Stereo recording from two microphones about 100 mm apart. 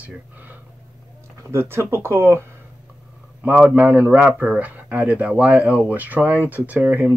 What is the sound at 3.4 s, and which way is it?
Speech, 15° right (ahead or behind).